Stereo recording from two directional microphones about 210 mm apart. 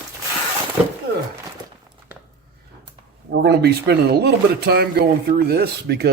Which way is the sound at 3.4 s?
50° right (ahead or behind).